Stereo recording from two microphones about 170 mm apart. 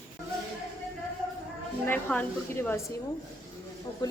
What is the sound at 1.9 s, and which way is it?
Speech, 10° left (ahead or behind).